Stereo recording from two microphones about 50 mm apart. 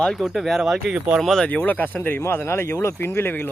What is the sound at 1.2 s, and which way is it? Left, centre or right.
Speech, centre.